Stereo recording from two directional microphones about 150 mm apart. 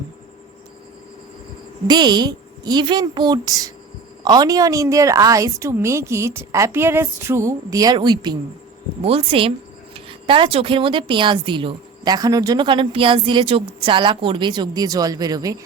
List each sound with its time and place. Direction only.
1.9 s a woman's voice: 30° right (ahead or behind)
9.0 s speech: 40° right (ahead or behind)